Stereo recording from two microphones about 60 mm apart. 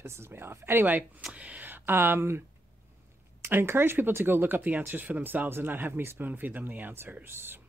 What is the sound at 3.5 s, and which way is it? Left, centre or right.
Speech, right.